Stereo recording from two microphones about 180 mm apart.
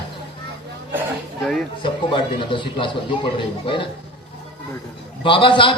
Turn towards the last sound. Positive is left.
turn(degrees=30)  # may be behind; listen again after turning